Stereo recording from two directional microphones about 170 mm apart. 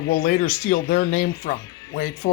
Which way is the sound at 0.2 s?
50° left (ahead or behind).